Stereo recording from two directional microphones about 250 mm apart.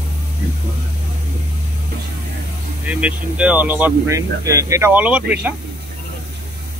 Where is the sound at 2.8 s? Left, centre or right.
Centre.